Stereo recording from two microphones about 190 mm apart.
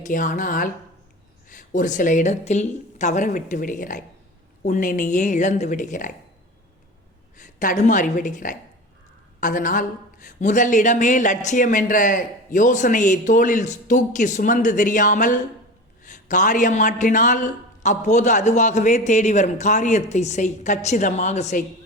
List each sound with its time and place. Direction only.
0.0 s a man's voice: 45° left (ahead or behind)
7.3 s a man's voice: 45° left (ahead or behind)